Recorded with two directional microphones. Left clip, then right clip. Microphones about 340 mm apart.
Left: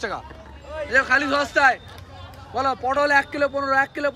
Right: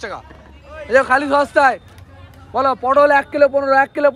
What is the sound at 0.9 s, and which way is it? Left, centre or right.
Speech, centre.